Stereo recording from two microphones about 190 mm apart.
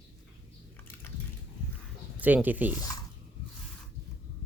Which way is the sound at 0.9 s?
10° left (ahead or behind).